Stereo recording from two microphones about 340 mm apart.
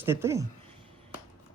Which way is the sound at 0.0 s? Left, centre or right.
Centre.